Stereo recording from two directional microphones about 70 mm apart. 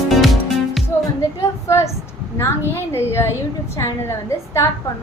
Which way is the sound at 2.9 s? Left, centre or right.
Left.